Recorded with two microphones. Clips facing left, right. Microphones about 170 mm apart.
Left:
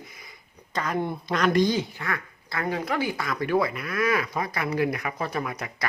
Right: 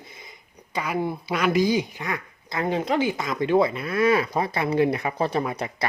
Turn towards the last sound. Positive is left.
turn(degrees=-30)  # may be behind; listen again after turning